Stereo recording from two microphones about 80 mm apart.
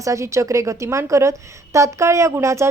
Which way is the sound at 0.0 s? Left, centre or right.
Right.